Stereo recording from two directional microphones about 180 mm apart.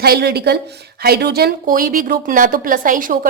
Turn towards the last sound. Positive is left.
turn(degrees=-50)  # may be behind; listen again after turning